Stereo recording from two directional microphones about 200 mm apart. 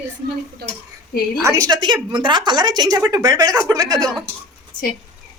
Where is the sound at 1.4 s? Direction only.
15° right (ahead or behind).